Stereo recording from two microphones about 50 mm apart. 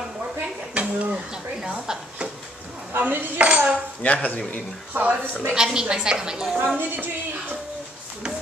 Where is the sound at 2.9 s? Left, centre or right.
Right.